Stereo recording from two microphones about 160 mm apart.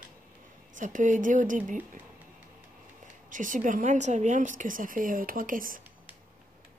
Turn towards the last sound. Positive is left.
turn(degrees=-60)  # may be behind; listen again after turning